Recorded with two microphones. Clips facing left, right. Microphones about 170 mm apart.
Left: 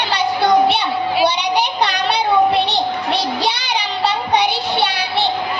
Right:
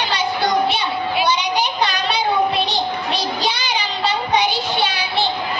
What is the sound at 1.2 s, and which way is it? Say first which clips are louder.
Child singing: left 2 dB; 65° left (ahead or behind).